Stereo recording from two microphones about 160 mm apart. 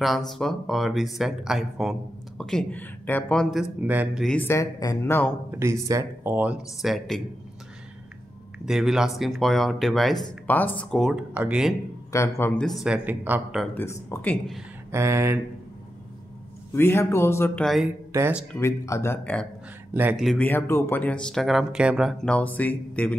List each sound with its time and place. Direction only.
0.0 s speech: centre (ahead or behind)
3.8 s speech: 10° right (ahead or behind)
4.2 s speech: 5° left (ahead or behind)
4.5 s speech: 20° left (ahead or behind)
5.5 s speech: 15° right (ahead or behind); by 7.2 s centre (ahead or behind)
8.6 s speech: 5° right (ahead or behind)
12.1 s speech: 15° left (ahead or behind)
12.5 s speech: centre (ahead or behind)
13.7 s speech: 15° left (ahead or behind)
14.9 s speech: 15° right (ahead or behind)
16.7 s speech: 15° left (ahead or behind)
19.9 s speech: 10° right (ahead or behind)
20.2 s speech: centre (ahead or behind)
20.4 s speech: 15° left (ahead or behind)